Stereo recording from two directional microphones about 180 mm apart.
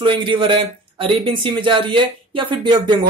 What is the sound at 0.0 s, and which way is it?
Speech, 30° right (ahead or behind).